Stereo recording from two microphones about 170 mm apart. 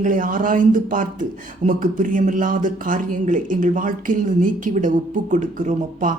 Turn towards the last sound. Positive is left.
turn(degrees=-50)  # may be behind; listen again after turning